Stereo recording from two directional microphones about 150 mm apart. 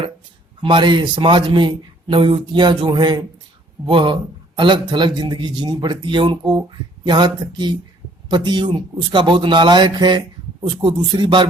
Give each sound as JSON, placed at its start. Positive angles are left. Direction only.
{"t": 0.6, "sound": "a man's voice", "side_deg": -30}